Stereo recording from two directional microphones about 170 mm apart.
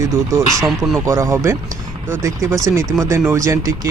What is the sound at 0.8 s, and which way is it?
Speech, 20° right (ahead or behind).